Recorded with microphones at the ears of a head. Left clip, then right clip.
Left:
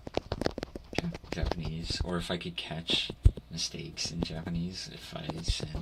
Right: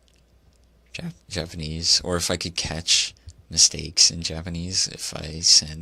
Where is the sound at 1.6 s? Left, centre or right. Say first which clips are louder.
Right 15 dB; right.